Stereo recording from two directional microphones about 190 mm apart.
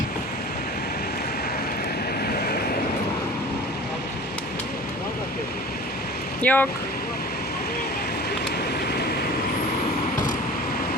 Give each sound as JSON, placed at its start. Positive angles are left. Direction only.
{"t": 2.2, "sound": "vehicle", "side_deg": 50}
{"t": 6.4, "sound": "speech", "side_deg": 10}